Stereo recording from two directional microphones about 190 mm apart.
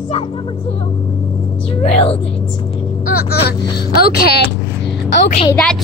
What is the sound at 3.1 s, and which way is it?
Speech, 55° left (ahead or behind).